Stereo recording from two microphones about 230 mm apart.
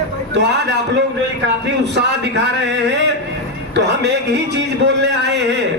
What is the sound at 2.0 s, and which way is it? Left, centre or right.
Speech, right.